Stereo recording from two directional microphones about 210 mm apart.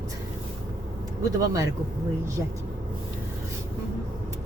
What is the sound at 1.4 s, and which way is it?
Speech, 15° right (ahead or behind).